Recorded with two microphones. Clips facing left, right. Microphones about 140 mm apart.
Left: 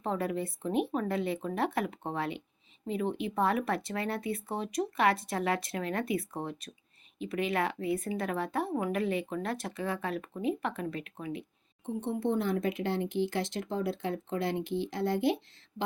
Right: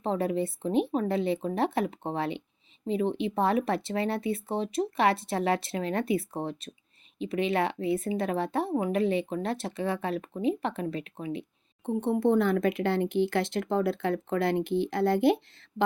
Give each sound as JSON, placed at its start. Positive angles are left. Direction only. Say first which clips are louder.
{"t": 0.0, "sound": "a woman's voice", "louder": "right 4 dB", "side_deg": -25}
{"t": 11.9, "sound": "speech", "louder": "right 7 dB", "side_deg": -60}